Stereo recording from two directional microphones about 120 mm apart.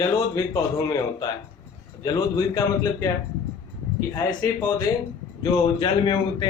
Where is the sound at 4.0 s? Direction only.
25° left (ahead or behind).